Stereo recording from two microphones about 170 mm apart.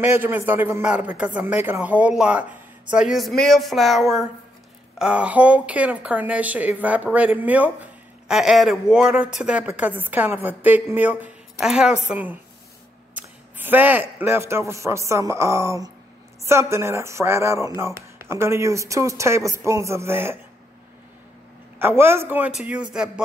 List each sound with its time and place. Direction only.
0.0 s a woman's voice: 10° right (ahead or behind)
21.7 s a woman's voice: 15° right (ahead or behind)